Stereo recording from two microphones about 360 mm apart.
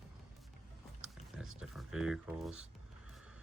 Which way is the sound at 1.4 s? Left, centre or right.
Centre.